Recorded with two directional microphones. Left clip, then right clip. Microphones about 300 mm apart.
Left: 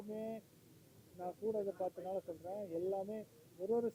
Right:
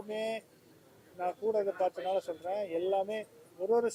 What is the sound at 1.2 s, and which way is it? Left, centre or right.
Speech, centre.